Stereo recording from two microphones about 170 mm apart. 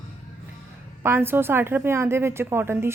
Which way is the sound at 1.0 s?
15° right (ahead or behind).